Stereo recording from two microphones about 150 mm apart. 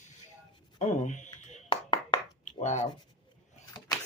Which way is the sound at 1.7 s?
30° left (ahead or behind).